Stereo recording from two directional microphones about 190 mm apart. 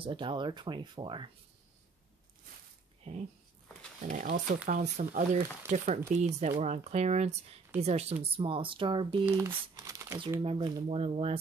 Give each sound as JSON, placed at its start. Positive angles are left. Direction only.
{"t": 0.0, "sound": "speech", "side_deg": -25}
{"t": 3.1, "sound": "speech", "side_deg": -30}
{"t": 9.2, "sound": "speech", "side_deg": -10}